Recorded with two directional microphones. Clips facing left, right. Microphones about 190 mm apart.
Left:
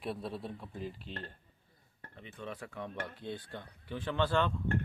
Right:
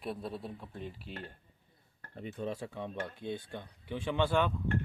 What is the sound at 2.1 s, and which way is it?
Speech, 35° right (ahead or behind).